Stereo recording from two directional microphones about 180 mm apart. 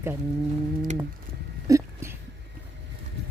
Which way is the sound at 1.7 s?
15° right (ahead or behind).